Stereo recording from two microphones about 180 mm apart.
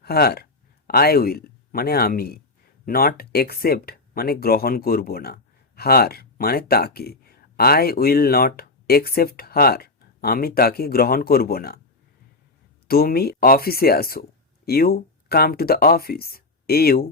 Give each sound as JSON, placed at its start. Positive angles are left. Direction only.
{"t": 0.0, "sound": "speech", "side_deg": 60}
{"t": 12.9, "sound": "speech", "side_deg": 55}